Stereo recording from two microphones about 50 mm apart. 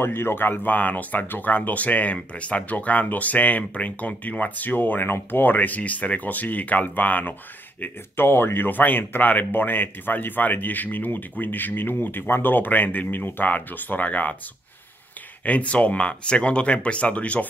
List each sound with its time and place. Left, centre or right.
0.0 s speech: left
1.2 s speech: left
1.5 s speech: left
7.8 s speech: left
15.4 s speech: left